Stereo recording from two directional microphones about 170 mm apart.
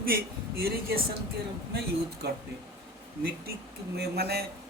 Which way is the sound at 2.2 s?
70° right (ahead or behind).